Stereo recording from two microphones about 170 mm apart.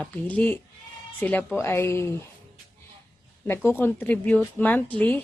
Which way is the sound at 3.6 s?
10° left (ahead or behind).